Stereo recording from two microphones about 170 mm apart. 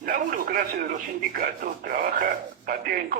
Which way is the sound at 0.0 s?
55° right (ahead or behind).